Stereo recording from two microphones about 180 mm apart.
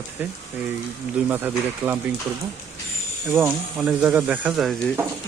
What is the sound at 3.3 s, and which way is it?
Speech, 10° right (ahead or behind).